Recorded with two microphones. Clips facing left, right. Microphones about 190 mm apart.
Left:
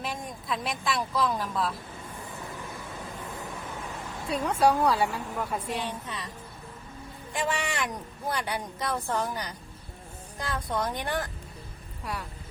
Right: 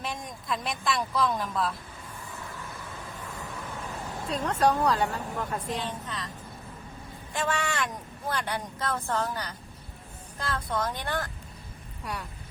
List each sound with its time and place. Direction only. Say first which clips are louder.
0.0 s speech: left 1 dB; centre (ahead or behind)
4.3 s a woman's voice: left 1 dB; 10° left (ahead or behind)
7.3 s a woman's voice: right 1 dB; 15° left (ahead or behind)
12.0 s speech: left 1 dB; centre (ahead or behind)